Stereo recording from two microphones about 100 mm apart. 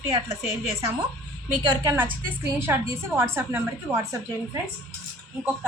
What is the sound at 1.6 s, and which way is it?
Speech, 40° right (ahead or behind).